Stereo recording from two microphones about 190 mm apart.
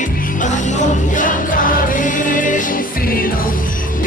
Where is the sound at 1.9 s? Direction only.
45° left (ahead or behind).